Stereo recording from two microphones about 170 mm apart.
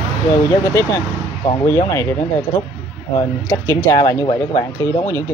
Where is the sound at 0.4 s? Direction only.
20° left (ahead or behind).